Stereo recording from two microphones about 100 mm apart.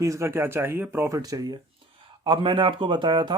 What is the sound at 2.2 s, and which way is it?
Speech, 55° right (ahead or behind).